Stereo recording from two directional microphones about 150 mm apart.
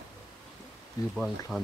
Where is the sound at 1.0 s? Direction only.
25° left (ahead or behind).